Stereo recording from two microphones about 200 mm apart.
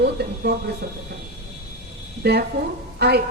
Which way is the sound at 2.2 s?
55° right (ahead or behind).